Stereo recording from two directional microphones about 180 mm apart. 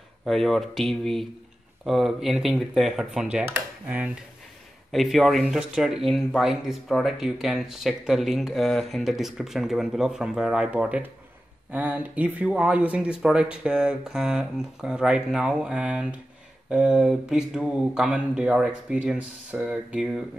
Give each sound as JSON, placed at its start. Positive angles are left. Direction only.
{"t": 0.2, "sound": "speech", "side_deg": 0}